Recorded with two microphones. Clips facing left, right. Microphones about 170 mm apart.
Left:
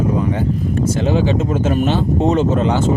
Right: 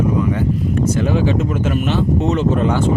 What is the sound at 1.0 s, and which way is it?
Speech, 25° left (ahead or behind).